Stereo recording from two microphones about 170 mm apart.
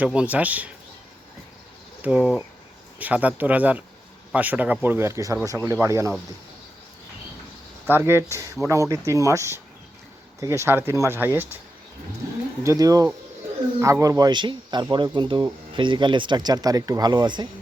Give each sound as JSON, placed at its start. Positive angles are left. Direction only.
{"t": 0.0, "sound": "speech", "side_deg": -5}
{"t": 2.0, "sound": "speech", "side_deg": -5}
{"t": 7.9, "sound": "speech", "side_deg": -15}
{"t": 12.6, "sound": "speech", "side_deg": -20}